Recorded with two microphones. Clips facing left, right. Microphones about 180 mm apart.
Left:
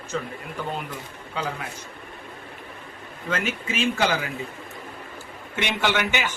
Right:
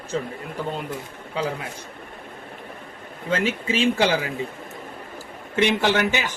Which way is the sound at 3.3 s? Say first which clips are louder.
Right 4 dB; 30° right (ahead or behind).